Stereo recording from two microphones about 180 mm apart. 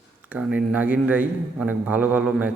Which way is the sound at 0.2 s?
5° right (ahead or behind).